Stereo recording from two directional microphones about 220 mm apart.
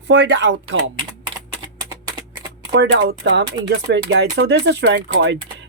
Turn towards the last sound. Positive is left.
turn(degrees=-50)  # may be behind; listen again after turning